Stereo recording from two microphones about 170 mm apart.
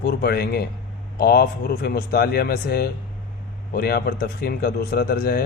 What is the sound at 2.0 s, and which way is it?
Speech, 60° left (ahead or behind).